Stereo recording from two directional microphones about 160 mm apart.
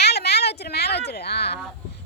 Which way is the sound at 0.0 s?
90° left.